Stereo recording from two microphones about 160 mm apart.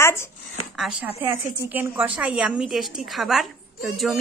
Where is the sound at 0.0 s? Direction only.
15° left (ahead or behind).